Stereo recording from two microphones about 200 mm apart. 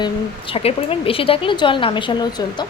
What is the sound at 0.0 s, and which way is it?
Speech, 25° left (ahead or behind).